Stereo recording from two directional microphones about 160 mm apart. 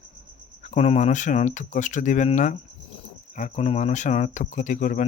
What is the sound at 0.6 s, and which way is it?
Speech, 45° left (ahead or behind).